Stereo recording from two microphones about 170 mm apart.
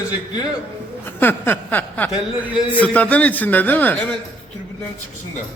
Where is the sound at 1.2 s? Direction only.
10° left (ahead or behind).